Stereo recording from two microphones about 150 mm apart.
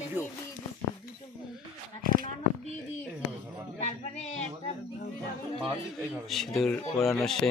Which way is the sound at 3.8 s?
50° left (ahead or behind).